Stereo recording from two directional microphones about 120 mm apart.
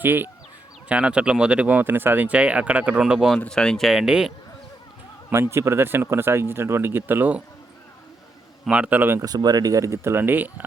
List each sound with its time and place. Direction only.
0.0 s speech: 15° right (ahead or behind)
5.3 s speech: 20° right (ahead or behind)
8.6 s speech: 10° right (ahead or behind)
9.2 s speech: 35° right (ahead or behind); by 10.7 s 15° right (ahead or behind)